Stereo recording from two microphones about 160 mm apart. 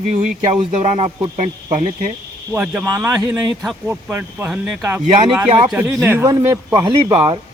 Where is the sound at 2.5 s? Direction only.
15° right (ahead or behind).